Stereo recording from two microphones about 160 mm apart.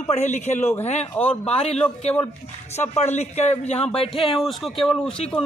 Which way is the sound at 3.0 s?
45° left (ahead or behind).